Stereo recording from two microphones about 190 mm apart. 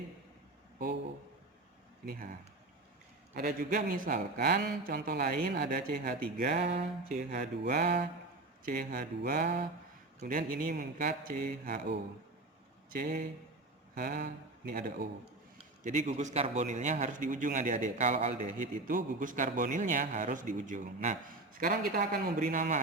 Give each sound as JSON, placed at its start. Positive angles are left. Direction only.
{"t": 3.3, "sound": "a man's voice", "side_deg": -50}
{"t": 7.3, "sound": "a sound", "side_deg": -55}
{"t": 8.6, "sound": "a man's voice", "side_deg": -45}